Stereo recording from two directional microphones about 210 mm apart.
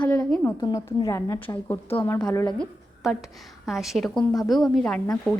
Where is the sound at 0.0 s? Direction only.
15° left (ahead or behind).